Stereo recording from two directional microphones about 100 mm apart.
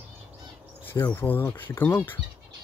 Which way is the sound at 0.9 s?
25° left (ahead or behind).